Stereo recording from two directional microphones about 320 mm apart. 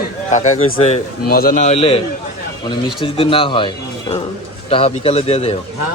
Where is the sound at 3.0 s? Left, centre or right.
Centre.